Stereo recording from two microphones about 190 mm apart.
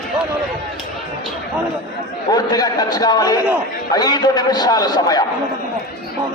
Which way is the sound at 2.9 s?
20° left (ahead or behind).